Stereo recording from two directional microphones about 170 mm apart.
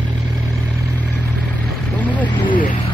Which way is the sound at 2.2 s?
30° left (ahead or behind).